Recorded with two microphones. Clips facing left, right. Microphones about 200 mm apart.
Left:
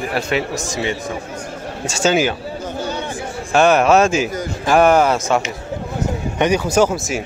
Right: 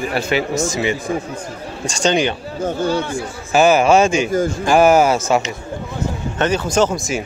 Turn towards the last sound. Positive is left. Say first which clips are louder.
# left 1 dB
turn(degrees=5)  # may be behind; listen again after turning